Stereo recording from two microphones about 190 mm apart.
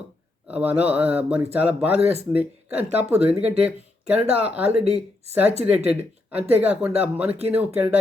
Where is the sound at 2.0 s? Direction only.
35° right (ahead or behind).